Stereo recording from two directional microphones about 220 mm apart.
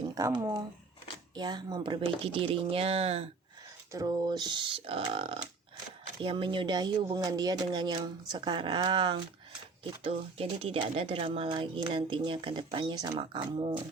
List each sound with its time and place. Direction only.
0.1 s speech: 15° right (ahead or behind)